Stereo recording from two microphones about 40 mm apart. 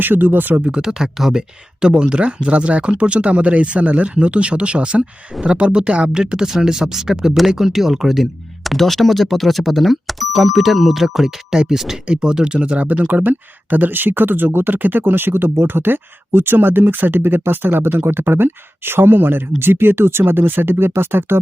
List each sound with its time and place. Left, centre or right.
0.0 s speech: right
0.8 s speech: centre
7.3 s speech: centre
12.0 s speech: right